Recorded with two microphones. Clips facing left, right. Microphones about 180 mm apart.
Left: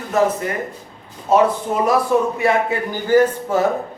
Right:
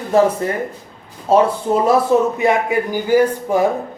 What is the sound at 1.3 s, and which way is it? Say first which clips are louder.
A man's voice: right 2 dB; 30° right (ahead or behind).